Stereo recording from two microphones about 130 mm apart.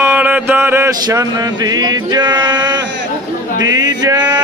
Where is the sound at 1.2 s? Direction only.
30° right (ahead or behind).